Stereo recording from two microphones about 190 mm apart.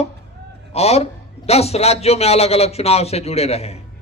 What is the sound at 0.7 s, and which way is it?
Speech, 35° left (ahead or behind).